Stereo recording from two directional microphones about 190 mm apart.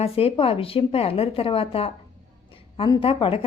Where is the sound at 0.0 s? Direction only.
30° left (ahead or behind).